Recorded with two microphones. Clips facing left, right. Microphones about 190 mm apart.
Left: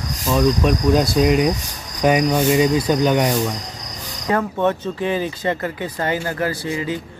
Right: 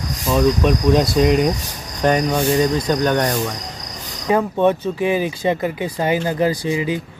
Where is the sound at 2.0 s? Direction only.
10° left (ahead or behind).